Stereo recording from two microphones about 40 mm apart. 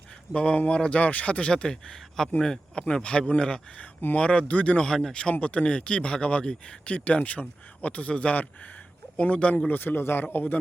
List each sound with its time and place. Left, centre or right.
0.3 s speech: left
4.9 s speech: centre
5.1 s speech: left
6.8 s speech: left
9.6 s speech: left
10.3 s speech: left